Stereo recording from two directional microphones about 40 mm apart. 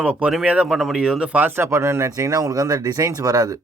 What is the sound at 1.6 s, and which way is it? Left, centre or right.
Speech, right.